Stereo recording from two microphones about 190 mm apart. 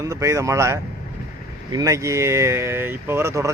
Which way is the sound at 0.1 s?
15° right (ahead or behind).